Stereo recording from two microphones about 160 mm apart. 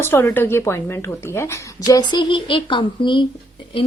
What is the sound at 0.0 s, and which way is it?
A woman's voice, 15° left (ahead or behind).